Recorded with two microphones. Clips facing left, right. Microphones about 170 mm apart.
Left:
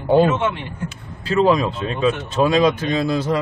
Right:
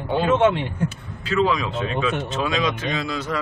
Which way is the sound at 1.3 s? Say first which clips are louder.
Left 5 dB; 35° left (ahead or behind).